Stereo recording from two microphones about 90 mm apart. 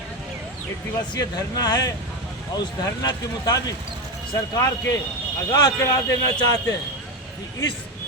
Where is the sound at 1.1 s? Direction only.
45° left (ahead or behind).